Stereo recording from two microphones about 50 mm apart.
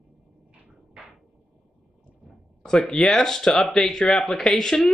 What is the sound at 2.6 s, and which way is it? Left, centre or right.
Speech, centre.